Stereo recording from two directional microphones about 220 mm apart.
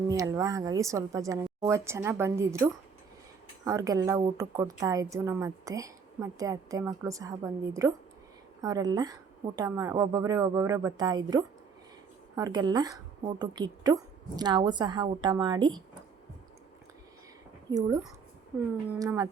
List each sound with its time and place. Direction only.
0.1 s a woman's voice: 15° right (ahead or behind)
17.7 s a woman's voice: 15° right (ahead or behind)